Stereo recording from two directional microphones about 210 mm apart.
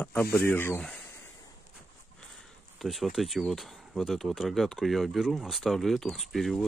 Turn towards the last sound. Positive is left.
turn(degrees=0)  # may be behind; listen again after turning